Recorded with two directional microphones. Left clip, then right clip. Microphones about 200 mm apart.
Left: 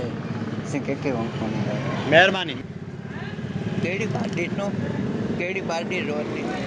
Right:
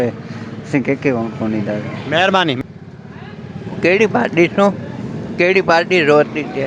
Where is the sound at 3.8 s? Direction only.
45° right (ahead or behind).